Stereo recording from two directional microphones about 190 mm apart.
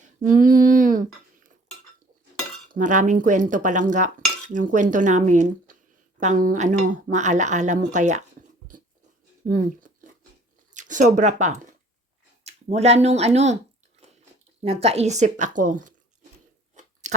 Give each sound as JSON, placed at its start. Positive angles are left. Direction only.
{"t": 0.0, "sound": "a sound", "side_deg": -45}
{"t": 2.6, "sound": "speech", "side_deg": -40}
{"t": 10.8, "sound": "speech", "side_deg": -40}
{"t": 14.0, "sound": "biting", "side_deg": -35}
{"t": 14.6, "sound": "speech", "side_deg": -30}
{"t": 16.7, "sound": "crunch", "side_deg": -40}